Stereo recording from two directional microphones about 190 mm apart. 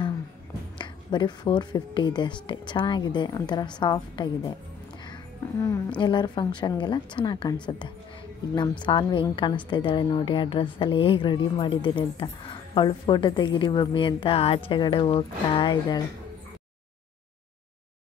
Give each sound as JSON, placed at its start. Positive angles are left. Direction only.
{"t": 0.7, "sound": "speech", "side_deg": 25}
{"t": 5.6, "sound": "a woman's voice", "side_deg": 15}
{"t": 8.8, "sound": "speech", "side_deg": 25}